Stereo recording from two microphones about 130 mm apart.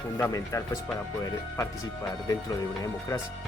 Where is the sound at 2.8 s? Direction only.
25° left (ahead or behind).